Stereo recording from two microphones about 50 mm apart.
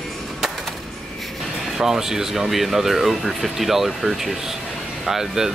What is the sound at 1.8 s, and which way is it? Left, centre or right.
Speech, centre.